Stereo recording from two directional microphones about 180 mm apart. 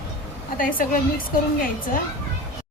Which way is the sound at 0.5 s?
50° left (ahead or behind).